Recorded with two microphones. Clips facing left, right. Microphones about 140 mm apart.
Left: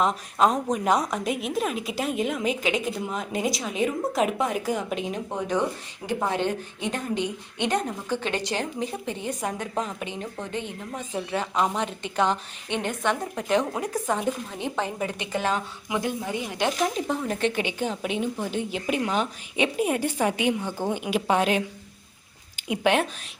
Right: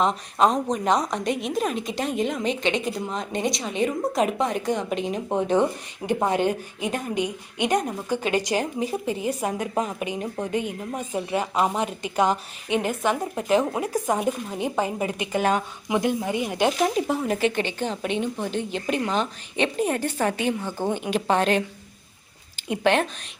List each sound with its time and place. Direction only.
0.0 s a woman's voice: 5° left (ahead or behind)
5.3 s a woman's voice: 20° right (ahead or behind); by 17.5 s 5° right (ahead or behind)
17.5 s a woman's voice: 10° left (ahead or behind)
22.7 s a woman's voice: 10° left (ahead or behind)